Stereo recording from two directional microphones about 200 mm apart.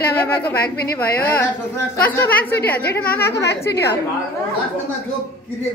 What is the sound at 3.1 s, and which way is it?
Speech, 50° left (ahead or behind).